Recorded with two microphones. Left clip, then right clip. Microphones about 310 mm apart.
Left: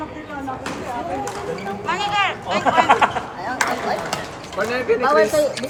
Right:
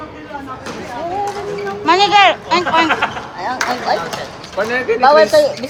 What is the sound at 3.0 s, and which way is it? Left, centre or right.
Speech, left.